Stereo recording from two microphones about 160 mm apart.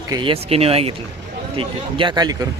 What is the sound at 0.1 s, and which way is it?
A man's voice, 30° right (ahead or behind).